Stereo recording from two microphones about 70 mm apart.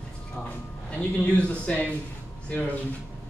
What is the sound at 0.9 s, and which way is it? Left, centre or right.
Speech, centre.